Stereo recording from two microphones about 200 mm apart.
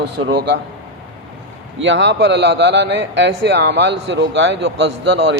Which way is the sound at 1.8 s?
65° right (ahead or behind).